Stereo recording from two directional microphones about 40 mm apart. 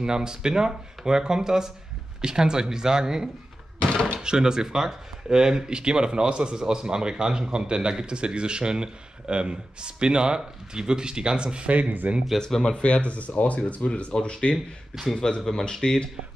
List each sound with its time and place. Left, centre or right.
0.0 s speech: centre
3.9 s door: left
4.2 s a man's voice: centre
12.1 s speech: right
12.4 s speech: centre
12.7 s speech: left
13.7 s speech: left